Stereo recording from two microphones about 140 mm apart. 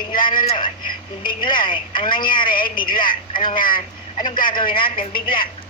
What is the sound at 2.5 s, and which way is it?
Speech, 90° left.